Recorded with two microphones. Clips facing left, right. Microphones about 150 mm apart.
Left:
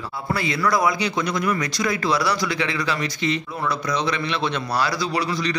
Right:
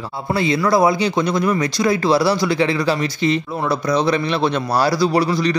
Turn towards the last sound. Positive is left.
turn(degrees=-35)  # may be behind; listen again after turning